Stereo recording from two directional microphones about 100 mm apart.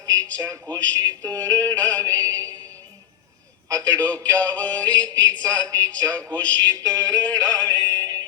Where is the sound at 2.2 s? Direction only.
40° right (ahead or behind).